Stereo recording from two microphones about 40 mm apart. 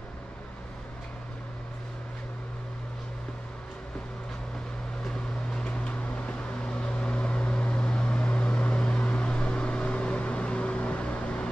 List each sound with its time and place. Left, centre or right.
5.0 s vehicle: centre
5.7 s vehicle: left